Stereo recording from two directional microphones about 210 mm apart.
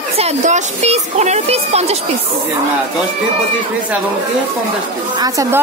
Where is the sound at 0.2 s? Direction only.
35° right (ahead or behind).